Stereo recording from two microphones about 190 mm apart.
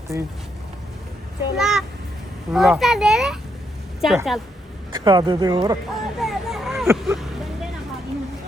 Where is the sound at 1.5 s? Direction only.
Centre (ahead or behind).